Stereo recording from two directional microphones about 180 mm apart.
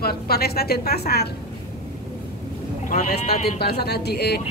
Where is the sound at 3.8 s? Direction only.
65° left (ahead or behind).